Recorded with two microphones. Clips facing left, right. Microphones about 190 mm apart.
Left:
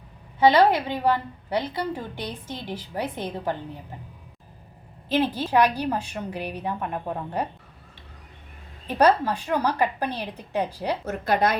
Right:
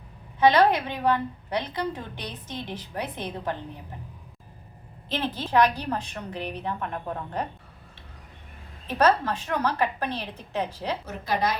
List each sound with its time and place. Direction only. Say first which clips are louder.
0.3 s a woman's voice: left 2 dB; 10° left (ahead or behind)
5.0 s a woman's voice: left 6 dB; 10° left (ahead or behind)
8.9 s a woman's voice: left 2 dB; 15° left (ahead or behind)
11.0 s a woman's voice: left 5 dB; 55° left (ahead or behind)